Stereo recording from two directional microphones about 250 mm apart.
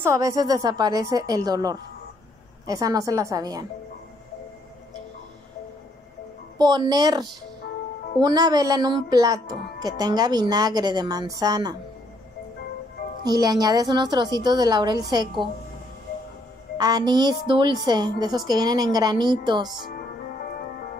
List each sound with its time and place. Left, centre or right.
0.0 s speech: centre
6.6 s speech: centre
13.2 s speech: centre
16.7 s speech: centre